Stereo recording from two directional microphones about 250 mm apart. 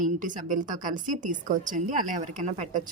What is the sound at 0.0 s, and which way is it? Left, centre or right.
A woman's voice, right.